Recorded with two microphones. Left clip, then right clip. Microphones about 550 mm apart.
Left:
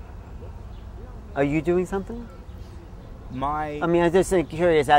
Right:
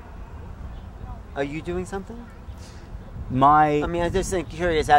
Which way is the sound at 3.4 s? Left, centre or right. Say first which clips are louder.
Right 11 dB; right.